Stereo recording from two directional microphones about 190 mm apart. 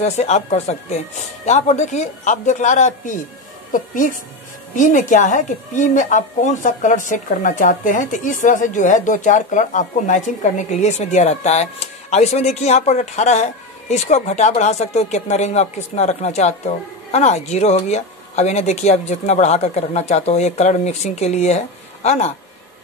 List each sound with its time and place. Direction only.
0.0 s a woman's voice: 35° left (ahead or behind)